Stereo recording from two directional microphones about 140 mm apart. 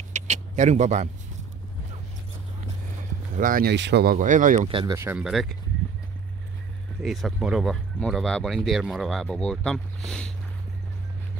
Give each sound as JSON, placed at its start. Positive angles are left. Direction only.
{"t": 0.1, "sound": "vehicle", "side_deg": -60}
{"t": 3.3, "sound": "speech", "side_deg": -85}
{"t": 4.6, "sound": "speech", "side_deg": -35}
{"t": 4.9, "sound": "speech", "side_deg": -15}
{"t": 5.2, "sound": "speech", "side_deg": 0}
{"t": 7.0, "sound": "speech", "side_deg": 0}